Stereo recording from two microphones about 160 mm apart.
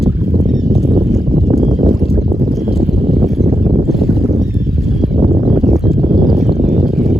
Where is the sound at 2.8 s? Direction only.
Centre (ahead or behind).